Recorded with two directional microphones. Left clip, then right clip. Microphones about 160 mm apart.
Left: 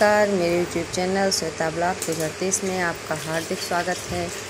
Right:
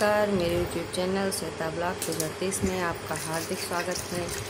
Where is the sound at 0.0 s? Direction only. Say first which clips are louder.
Left 6 dB; 25° left (ahead or behind).